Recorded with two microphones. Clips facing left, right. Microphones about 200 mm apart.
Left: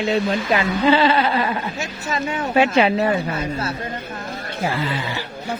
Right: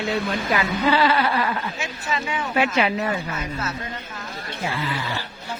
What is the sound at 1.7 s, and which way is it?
Speech, 40° left (ahead or behind).